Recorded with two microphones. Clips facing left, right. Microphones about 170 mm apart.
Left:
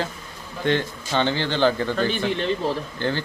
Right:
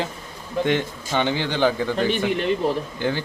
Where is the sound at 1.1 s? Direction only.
15° right (ahead or behind).